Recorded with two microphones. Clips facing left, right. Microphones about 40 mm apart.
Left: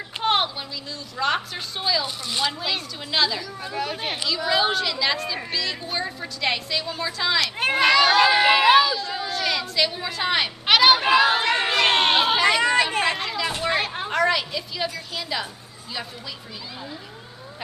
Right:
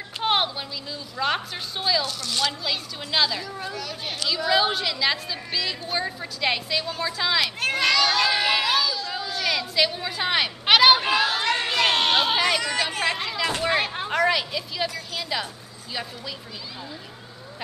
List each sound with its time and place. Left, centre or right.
0.2 s a sound: centre
1.1 s a woman's voice: centre
2.0 s speech: centre
3.1 s a woman's voice: centre
3.7 s speech: left
4.5 s a woman's voice: centre
7.5 s a sound: centre
9.3 s speech: centre
11.1 s speech: left
12.2 s speech: centre
12.4 s speech: left
13.2 s a sound: centre
13.6 s a woman's voice: centre